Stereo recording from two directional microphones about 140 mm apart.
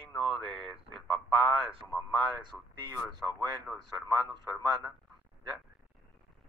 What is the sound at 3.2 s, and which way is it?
Speech, 25° right (ahead or behind).